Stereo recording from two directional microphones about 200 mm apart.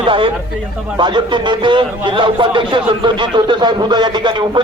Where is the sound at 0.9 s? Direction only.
20° right (ahead or behind).